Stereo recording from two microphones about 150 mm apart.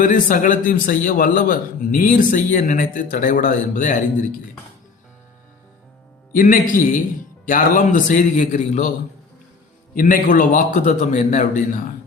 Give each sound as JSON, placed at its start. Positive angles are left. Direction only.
{"t": 0.0, "sound": "a man's voice", "side_deg": 60}
{"t": 6.3, "sound": "a man's voice", "side_deg": 65}
{"t": 9.9, "sound": "a man's voice", "side_deg": 65}